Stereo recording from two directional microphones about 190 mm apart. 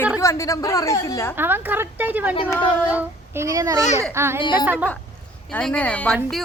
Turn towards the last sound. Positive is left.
turn(degrees=5)  # may be behind; listen again after turning